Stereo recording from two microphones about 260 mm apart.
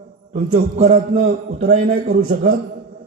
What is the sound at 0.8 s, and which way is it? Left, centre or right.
A man's voice, right.